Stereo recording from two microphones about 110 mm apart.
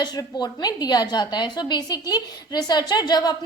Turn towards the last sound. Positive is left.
turn(degrees=40)  # may be behind; listen again after turning